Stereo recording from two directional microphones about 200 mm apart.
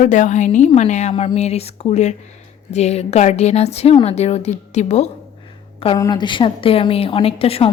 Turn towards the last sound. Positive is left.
turn(degrees=30)  # may be behind; listen again after turning